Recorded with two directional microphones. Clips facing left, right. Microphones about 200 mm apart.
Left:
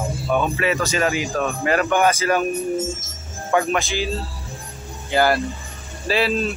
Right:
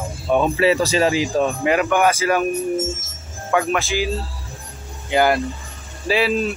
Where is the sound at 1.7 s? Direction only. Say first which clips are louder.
Left 1 dB; 10° right (ahead or behind).